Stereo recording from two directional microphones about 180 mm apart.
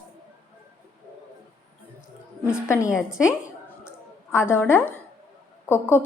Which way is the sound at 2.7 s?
15° left (ahead or behind).